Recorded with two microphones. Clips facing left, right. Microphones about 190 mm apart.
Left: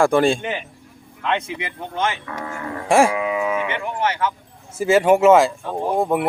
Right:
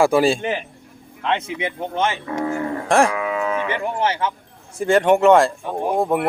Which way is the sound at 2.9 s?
10° left (ahead or behind).